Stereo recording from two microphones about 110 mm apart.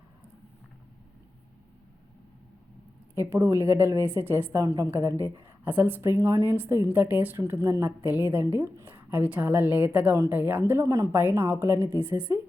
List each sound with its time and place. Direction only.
3.2 s speech: 25° right (ahead or behind)
4.6 s speech: 30° right (ahead or behind)
5.6 s speech: 15° right (ahead or behind)